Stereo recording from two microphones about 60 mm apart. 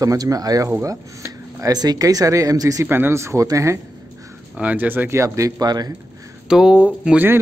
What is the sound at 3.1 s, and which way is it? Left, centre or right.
Speech, right.